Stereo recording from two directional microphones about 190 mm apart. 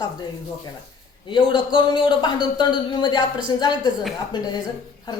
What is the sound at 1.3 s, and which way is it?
Speech, 25° left (ahead or behind).